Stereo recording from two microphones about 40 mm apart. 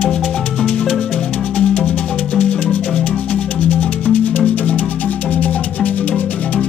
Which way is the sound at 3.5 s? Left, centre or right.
Left.